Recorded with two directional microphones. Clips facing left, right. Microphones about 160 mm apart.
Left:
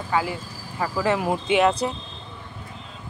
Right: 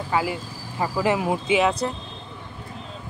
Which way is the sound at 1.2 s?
Centre (ahead or behind).